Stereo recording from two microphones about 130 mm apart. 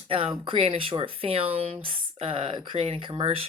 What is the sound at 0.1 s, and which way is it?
Speech, 45° right (ahead or behind).